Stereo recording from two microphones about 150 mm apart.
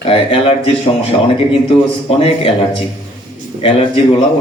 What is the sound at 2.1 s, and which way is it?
Speech, 40° left (ahead or behind).